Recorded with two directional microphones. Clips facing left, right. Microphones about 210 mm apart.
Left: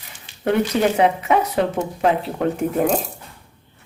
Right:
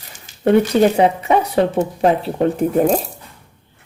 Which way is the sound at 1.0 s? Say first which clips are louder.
Right 2 dB; 30° right (ahead or behind).